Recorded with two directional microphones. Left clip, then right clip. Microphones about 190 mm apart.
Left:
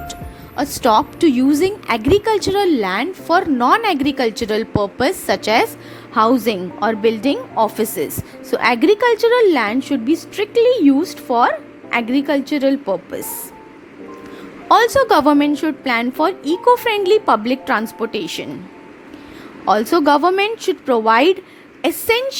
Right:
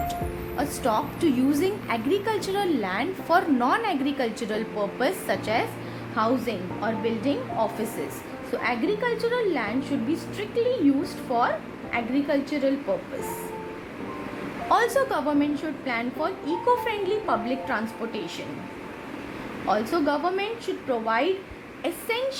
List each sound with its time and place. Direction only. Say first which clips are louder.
0.1 s a woman's voice: right 1 dB; 40° left (ahead or behind)
14.7 s a woman's voice: left 10 dB; 40° left (ahead or behind)
15.3 s a woman's voice: left 11 dB; 55° left (ahead or behind)
19.6 s a woman's voice: left 10 dB; 55° left (ahead or behind)